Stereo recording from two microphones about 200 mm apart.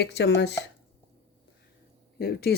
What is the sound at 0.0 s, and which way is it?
Speech, 55° left (ahead or behind).